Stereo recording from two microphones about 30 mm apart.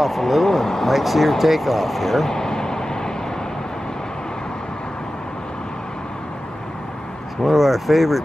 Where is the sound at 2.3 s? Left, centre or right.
Left.